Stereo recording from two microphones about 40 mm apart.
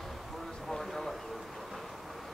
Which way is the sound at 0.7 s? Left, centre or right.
Centre.